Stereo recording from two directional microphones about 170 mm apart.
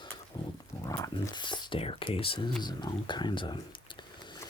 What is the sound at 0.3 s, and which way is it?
Dog, 25° left (ahead or behind).